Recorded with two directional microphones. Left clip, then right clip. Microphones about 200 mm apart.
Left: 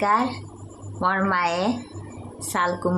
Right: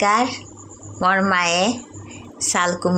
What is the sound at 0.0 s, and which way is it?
Speech, 15° right (ahead or behind).